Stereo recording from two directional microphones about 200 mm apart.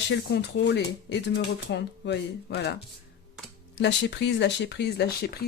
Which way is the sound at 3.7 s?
60° left (ahead or behind).